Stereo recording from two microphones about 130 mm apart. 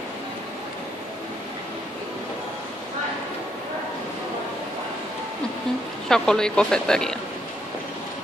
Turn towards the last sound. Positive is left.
turn(degrees=5)  # may be behind; listen again after turning